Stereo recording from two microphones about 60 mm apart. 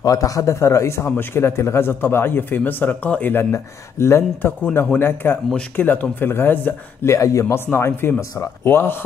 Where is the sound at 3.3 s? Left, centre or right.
Left.